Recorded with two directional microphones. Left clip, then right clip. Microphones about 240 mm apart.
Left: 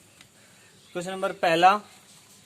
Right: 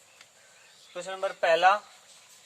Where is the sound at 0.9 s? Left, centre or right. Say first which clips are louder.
Left 3 dB; left.